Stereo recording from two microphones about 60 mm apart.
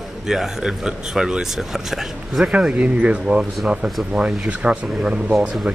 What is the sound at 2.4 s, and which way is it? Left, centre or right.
Speech, centre.